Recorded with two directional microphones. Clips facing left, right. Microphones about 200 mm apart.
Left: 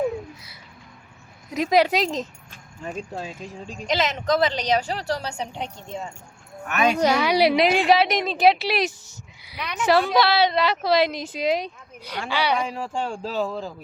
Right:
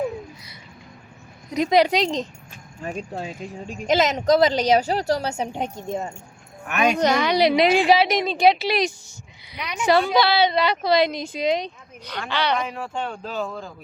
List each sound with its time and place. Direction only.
1.5 s a woman's voice: 5° left (ahead or behind)
2.8 s speech: 15° right (ahead or behind)
3.8 s a woman's voice: 40° right (ahead or behind)
6.7 s speech: 10° right (ahead or behind)
7.0 s a woman's voice: 10° left (ahead or behind)
12.6 s speech: 30° left (ahead or behind)
13.4 s a woman's voice: centre (ahead or behind)